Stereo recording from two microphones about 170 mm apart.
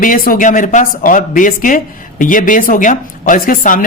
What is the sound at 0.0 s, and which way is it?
Speech, 50° left (ahead or behind).